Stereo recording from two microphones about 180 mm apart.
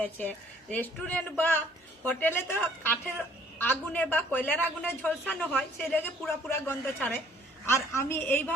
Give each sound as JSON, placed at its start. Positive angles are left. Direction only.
{"t": 0.0, "sound": "a man's voice", "side_deg": 10}